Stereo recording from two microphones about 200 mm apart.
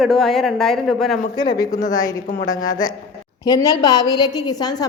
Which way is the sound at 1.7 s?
40° left (ahead or behind).